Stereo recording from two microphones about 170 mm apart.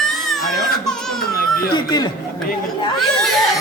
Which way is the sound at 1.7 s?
25° left (ahead or behind).